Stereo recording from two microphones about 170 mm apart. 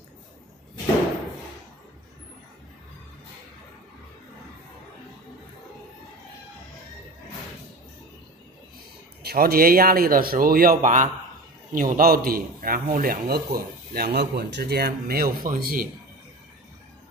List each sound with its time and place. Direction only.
9.2 s a man's voice: 65° right (ahead or behind)